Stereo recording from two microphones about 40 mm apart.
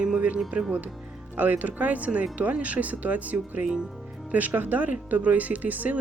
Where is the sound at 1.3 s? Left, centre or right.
Right.